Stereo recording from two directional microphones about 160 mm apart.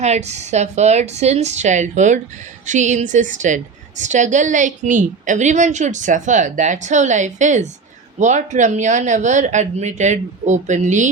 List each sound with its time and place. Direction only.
0.0 s a woman's voice: 45° right (ahead or behind)